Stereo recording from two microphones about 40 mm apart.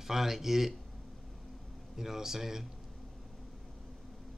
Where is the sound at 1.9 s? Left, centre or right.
Centre.